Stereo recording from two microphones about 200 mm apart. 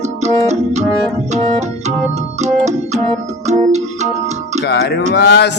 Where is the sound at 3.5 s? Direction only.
35° right (ahead or behind).